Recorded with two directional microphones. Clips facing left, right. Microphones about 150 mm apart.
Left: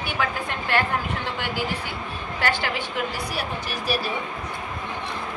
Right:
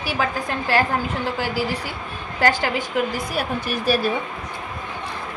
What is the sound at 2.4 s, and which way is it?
Speech, 40° right (ahead or behind).